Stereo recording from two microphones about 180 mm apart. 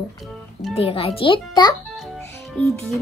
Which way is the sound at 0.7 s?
35° left (ahead or behind).